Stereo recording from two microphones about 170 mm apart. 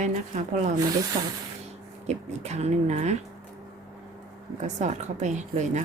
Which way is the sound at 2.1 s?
40° right (ahead or behind).